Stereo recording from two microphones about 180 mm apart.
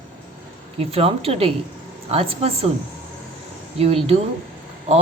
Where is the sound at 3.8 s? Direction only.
35° right (ahead or behind).